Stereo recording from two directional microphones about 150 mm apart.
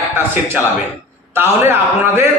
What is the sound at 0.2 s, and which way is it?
A man's voice, 15° right (ahead or behind).